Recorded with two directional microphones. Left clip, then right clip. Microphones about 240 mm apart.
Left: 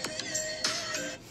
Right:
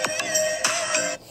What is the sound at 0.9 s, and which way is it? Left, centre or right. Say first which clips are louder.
Music: right 11 dB; right.